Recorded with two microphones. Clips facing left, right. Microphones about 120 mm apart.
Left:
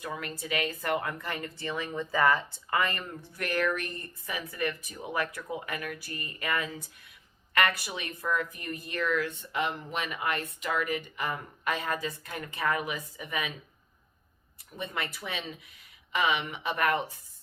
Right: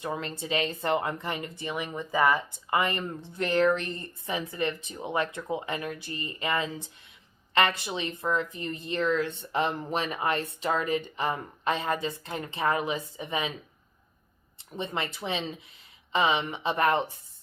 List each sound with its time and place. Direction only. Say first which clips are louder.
0.0 s speech: right 4 dB; 25° right (ahead or behind)
14.6 s speech: right 3 dB; 25° right (ahead or behind)